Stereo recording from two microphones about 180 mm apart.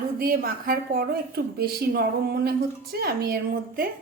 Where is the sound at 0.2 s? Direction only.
55° right (ahead or behind).